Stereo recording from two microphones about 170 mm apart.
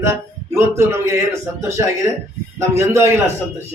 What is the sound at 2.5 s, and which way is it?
Speech, 15° right (ahead or behind).